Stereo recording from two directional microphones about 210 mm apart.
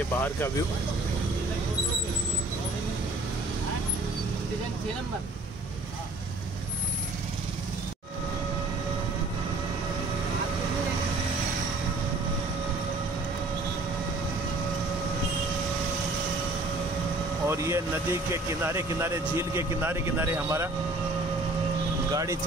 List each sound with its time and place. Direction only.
0.1 s speech: 10° left (ahead or behind)
17.5 s speech: 15° right (ahead or behind)
22.1 s speech: 15° right (ahead or behind)